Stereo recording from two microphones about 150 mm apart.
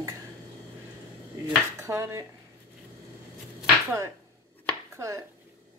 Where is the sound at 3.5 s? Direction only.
15° right (ahead or behind).